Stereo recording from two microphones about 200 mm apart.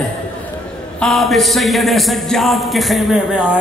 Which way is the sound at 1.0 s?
Centre (ahead or behind).